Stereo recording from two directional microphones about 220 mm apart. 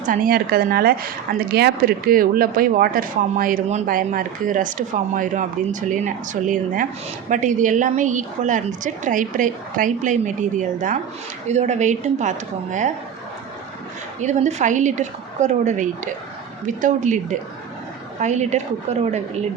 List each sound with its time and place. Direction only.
0.0 s speech: 40° right (ahead or behind)
14.2 s speech: 30° right (ahead or behind)
18.2 s speech: 30° right (ahead or behind)